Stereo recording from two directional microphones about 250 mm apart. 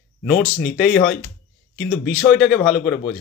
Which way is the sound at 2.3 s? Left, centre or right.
Left.